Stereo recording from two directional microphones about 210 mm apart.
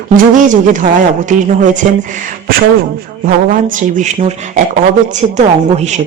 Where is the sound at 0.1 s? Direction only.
40° right (ahead or behind).